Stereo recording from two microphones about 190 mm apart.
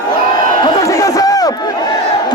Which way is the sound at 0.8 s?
20° left (ahead or behind).